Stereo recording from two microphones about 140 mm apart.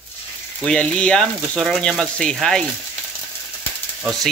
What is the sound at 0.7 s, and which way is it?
Speech, 5° left (ahead or behind).